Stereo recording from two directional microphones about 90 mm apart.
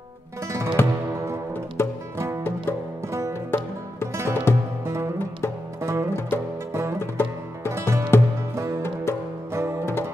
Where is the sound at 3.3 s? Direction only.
30° left (ahead or behind).